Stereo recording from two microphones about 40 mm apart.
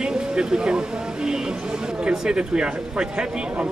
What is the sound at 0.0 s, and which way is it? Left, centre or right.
Speech, right.